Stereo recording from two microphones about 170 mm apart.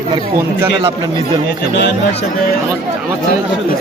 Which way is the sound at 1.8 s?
90° left.